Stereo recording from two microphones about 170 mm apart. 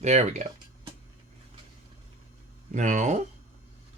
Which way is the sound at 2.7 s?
45° right (ahead or behind).